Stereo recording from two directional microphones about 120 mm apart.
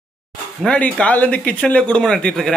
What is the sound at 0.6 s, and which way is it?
Speech, 10° left (ahead or behind).